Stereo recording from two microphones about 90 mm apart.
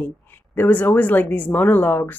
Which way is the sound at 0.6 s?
20° left (ahead or behind).